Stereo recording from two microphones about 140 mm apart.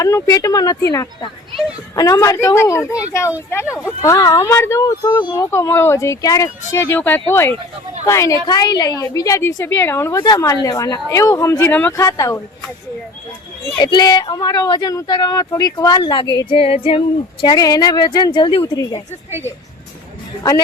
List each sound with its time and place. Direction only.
0.0 s speech: 25° left (ahead or behind)
13.7 s speech: 30° left (ahead or behind)
17.4 s speech: 30° left (ahead or behind)
18.7 s speech: 25° left (ahead or behind)